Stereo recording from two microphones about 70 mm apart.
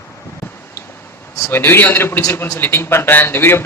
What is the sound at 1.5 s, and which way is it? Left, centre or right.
A man's voice, left.